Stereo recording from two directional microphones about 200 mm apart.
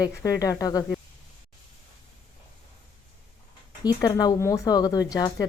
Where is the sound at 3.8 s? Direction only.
20° left (ahead or behind).